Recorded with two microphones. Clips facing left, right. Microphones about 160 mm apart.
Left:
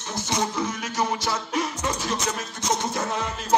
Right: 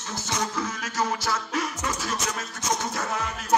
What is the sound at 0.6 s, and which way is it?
Music, 15° left (ahead or behind).